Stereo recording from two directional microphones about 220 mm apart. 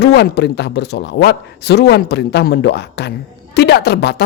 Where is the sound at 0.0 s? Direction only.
50° left (ahead or behind).